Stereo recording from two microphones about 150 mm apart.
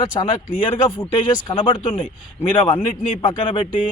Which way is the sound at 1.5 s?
30° left (ahead or behind).